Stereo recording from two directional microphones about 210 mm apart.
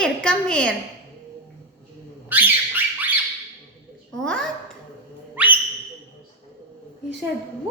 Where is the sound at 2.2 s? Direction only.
10° right (ahead or behind).